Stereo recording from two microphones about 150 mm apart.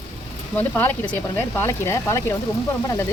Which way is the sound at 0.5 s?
10° left (ahead or behind).